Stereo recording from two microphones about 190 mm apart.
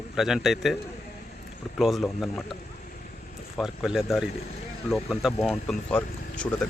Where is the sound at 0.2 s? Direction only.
Centre (ahead or behind).